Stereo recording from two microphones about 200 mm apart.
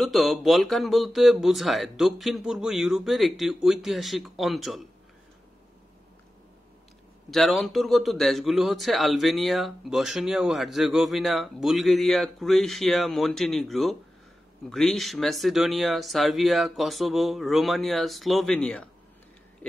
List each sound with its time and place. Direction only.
0.0 s a man's voice: centre (ahead or behind)
7.2 s a man's voice: centre (ahead or behind)